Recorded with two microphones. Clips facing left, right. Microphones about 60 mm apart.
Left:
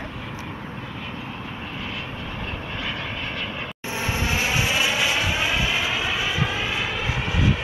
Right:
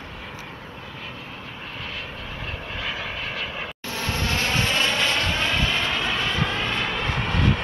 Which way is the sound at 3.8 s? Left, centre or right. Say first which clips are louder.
Left 2 dB; centre.